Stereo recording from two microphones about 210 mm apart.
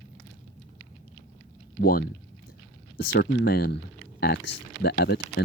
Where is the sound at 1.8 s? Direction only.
45° left (ahead or behind).